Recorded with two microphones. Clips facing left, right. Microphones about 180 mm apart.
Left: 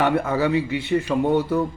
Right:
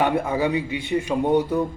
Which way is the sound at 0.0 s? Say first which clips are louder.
Left 1 dB; 15° right (ahead or behind).